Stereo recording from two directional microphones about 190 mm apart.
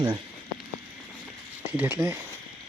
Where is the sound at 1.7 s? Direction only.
10° right (ahead or behind).